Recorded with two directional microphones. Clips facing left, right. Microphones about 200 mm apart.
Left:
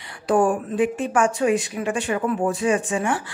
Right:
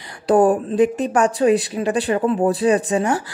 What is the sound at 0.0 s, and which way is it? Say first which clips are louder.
A woman's voice: right 4 dB; 35° right (ahead or behind).